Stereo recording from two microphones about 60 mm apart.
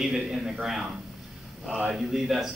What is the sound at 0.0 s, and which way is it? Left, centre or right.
A man's voice, centre.